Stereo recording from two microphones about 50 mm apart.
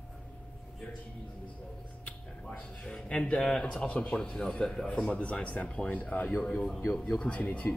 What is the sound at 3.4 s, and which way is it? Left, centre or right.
Speech, centre.